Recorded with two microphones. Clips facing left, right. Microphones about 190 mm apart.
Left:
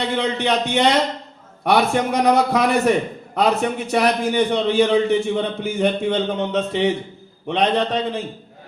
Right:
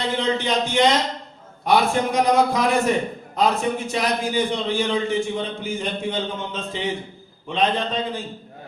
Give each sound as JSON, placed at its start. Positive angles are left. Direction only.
{"t": 0.2, "sound": "a man's voice", "side_deg": 65}